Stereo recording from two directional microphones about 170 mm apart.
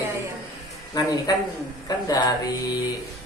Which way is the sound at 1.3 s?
20° left (ahead or behind).